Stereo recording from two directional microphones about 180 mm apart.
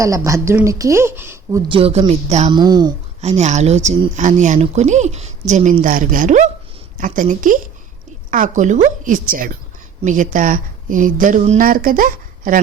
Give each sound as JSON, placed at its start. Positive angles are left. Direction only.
{"t": 0.3, "sound": "speech", "side_deg": -15}
{"t": 1.6, "sound": "speech", "side_deg": -30}
{"t": 2.5, "sound": "speech", "side_deg": -25}
{"t": 3.2, "sound": "a woman's voice", "side_deg": -40}